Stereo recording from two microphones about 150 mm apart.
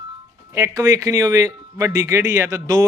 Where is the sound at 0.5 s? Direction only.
20° right (ahead or behind).